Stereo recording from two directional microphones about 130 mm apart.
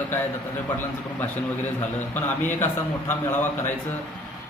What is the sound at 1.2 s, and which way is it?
A man's voice, 15° left (ahead or behind).